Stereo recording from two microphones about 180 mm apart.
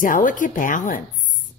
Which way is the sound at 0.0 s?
50° left (ahead or behind).